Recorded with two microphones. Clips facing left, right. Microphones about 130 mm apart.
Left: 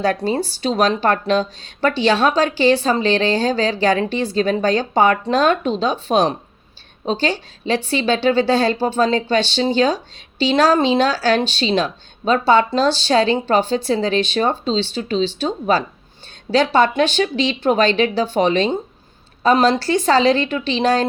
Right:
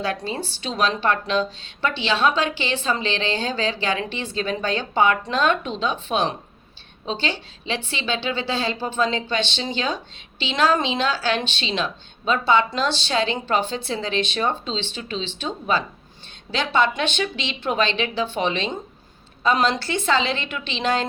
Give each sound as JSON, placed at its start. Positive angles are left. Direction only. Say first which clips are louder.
{"t": 0.0, "sound": "speech", "louder": "left 8 dB", "side_deg": 45}